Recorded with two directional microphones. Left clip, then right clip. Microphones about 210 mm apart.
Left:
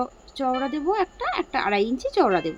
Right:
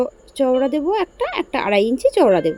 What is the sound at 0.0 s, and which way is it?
A woman's voice, 15° right (ahead or behind).